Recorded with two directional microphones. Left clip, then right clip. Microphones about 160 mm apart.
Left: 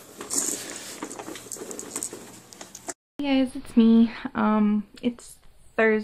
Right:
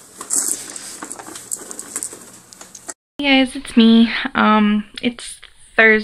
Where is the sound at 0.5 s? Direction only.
45° left (ahead or behind).